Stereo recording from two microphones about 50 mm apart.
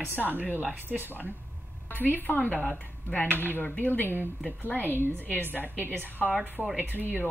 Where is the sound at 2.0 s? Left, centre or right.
Left.